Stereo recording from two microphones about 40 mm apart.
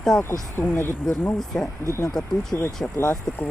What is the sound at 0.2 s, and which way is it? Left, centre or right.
Speech, left.